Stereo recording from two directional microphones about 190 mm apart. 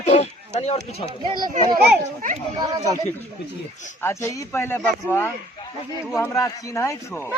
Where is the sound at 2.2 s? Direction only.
45° right (ahead or behind).